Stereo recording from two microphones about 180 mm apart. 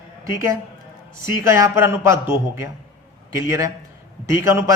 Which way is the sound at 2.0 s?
15° right (ahead or behind).